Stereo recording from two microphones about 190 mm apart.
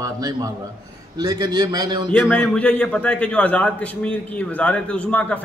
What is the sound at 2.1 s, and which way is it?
A man's voice, 5° left (ahead or behind).